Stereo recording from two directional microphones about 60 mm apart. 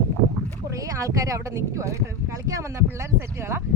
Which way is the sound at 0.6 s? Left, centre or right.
Right.